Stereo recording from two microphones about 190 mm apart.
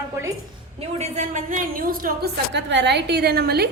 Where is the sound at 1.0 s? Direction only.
35° right (ahead or behind).